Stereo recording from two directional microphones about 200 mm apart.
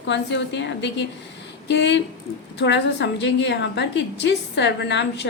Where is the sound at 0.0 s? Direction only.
60° left (ahead or behind).